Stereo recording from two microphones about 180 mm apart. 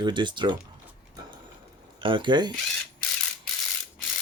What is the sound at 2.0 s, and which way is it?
Speech, 25° right (ahead or behind).